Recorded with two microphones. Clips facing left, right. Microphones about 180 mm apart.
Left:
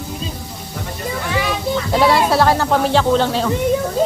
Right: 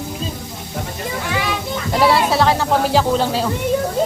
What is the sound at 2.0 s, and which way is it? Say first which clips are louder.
Speech: even; centre (ahead or behind).